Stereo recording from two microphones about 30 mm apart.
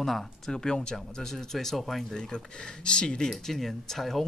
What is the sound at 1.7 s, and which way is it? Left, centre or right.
Speech, centre.